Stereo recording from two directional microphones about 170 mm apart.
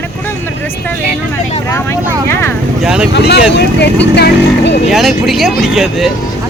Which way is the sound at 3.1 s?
75° left (ahead or behind).